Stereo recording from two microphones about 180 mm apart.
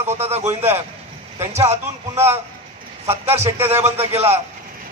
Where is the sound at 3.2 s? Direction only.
35° right (ahead or behind).